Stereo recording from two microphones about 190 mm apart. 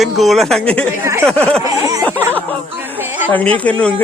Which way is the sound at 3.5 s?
5° left (ahead or behind).